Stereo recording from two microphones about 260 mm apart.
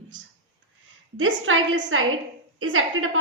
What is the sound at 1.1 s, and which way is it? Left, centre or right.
A woman's voice, right.